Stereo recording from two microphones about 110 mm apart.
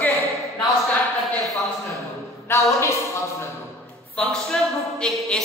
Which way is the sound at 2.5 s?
25° left (ahead or behind).